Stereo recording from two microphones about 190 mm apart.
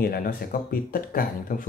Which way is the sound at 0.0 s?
50° left (ahead or behind).